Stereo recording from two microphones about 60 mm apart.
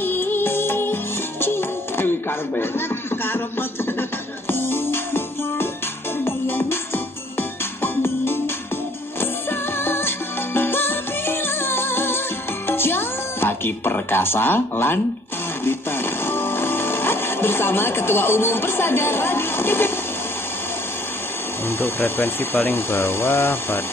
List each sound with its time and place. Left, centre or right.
0.0 s music: left
4.5 s music: left
16.3 s speech: left
21.6 s speech: left